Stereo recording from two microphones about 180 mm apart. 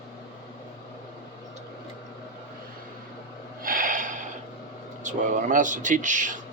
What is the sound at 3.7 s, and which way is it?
Gasp, 50° right (ahead or behind).